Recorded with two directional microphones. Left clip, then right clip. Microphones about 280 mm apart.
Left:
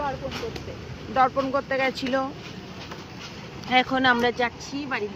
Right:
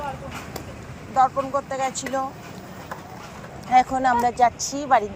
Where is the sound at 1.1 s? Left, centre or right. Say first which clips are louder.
Right 2 dB; left.